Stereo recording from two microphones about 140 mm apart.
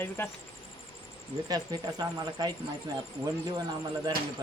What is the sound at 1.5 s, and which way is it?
Speech, 30° right (ahead or behind).